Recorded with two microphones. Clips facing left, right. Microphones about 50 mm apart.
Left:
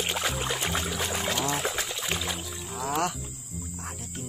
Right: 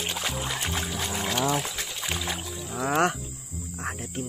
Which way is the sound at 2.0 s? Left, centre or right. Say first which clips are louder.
Even; centre.